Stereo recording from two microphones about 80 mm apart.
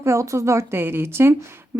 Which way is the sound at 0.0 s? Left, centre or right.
Right.